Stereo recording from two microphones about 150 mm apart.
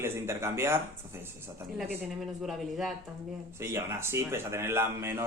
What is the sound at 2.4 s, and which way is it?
Speech, centre (ahead or behind).